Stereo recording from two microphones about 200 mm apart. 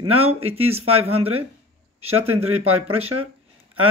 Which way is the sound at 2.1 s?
90° right.